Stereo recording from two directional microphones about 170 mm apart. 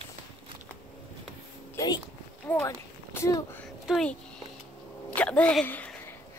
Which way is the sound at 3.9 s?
5° left (ahead or behind).